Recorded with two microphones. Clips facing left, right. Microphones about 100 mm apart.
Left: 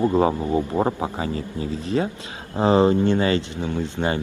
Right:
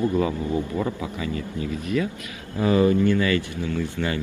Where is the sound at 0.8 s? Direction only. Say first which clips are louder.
Left 5 dB; 55° left (ahead or behind).